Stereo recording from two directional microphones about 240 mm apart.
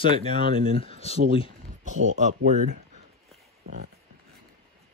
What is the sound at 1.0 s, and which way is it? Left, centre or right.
Speech, left.